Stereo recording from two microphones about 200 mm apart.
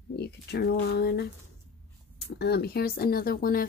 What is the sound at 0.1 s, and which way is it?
Speech, 55° left (ahead or behind).